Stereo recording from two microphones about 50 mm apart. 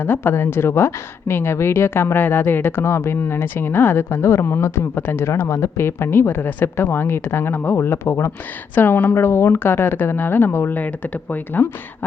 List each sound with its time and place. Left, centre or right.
0.0 s a woman's voice: left
5.0 s a man's voice: left
5.5 s a woman's voice: left
8.7 s a woman's voice: left
10.8 s speech: left